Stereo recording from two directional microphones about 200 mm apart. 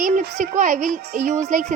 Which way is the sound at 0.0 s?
40° right (ahead or behind).